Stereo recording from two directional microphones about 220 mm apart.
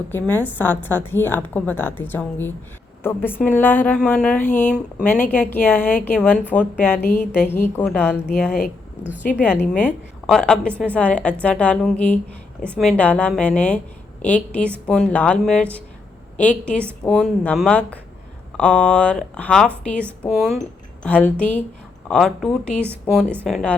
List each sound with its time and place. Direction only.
0.1 s a woman's voice: 10° left (ahead or behind)
4.4 s speech: 35° left (ahead or behind)
5.0 s a woman's voice: 10° left (ahead or behind)
10.2 s a woman's voice: 5° left (ahead or behind)